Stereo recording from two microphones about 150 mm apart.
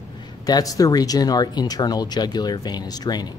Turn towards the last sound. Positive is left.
turn(degrees=25)  # may be behind; listen again after turning